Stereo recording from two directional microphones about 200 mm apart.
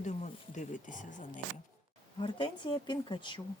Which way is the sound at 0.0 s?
35° left (ahead or behind).